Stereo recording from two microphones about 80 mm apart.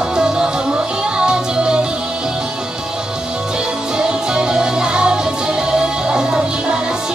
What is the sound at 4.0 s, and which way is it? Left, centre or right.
Music, centre.